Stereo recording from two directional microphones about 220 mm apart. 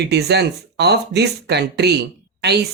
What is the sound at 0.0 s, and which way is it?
Speech, 50° right (ahead or behind).